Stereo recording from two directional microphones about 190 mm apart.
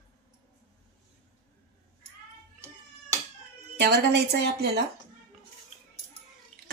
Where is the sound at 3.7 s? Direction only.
55° right (ahead or behind).